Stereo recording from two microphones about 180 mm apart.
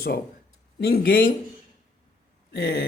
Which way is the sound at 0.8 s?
60° left (ahead or behind).